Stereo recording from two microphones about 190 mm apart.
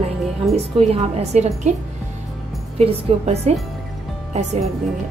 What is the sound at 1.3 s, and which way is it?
Speech, 40° right (ahead or behind).